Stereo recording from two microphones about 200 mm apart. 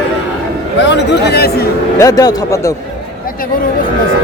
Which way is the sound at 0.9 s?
55° left (ahead or behind).